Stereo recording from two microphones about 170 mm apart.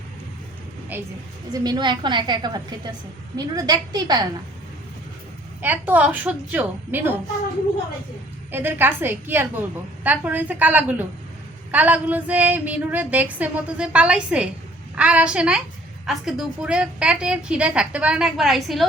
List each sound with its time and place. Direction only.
0.9 s a woman's voice: 10° right (ahead or behind)
1.6 s a woman's voice: 25° right (ahead or behind)
5.6 s a woman's voice: 10° right (ahead or behind)
8.5 s a woman's voice: 10° right (ahead or behind)